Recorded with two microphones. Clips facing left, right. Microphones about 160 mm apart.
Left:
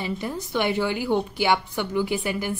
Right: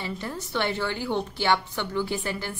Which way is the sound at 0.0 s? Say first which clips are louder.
Left 4 dB; 15° left (ahead or behind).